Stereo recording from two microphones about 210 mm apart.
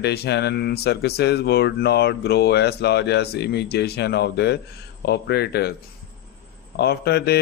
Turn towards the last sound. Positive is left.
turn(degrees=50)  # may be behind; listen again after turning